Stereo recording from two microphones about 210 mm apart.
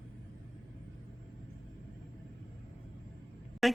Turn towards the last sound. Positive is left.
turn(degrees=0)  # may be behind; listen again after turning